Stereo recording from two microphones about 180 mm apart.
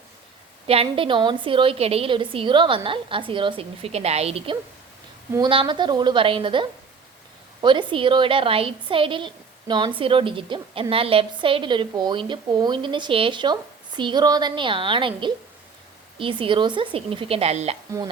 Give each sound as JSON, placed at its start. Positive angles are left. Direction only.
{"t": 0.7, "sound": "a woman's voice", "side_deg": -30}